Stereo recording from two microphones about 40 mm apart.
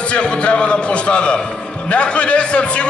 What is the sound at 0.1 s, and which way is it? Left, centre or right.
A man's voice, left.